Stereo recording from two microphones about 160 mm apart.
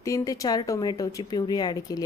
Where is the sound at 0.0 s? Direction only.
20° left (ahead or behind).